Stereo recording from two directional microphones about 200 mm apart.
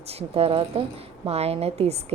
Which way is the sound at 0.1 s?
30° right (ahead or behind).